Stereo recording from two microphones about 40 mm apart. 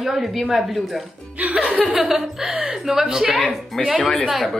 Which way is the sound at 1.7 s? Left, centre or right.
Right.